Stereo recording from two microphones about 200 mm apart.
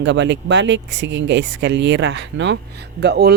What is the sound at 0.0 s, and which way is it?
Speech, 65° right (ahead or behind).